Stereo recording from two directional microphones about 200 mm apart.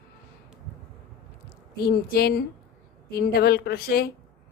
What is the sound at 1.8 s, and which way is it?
A woman's voice, 50° left (ahead or behind).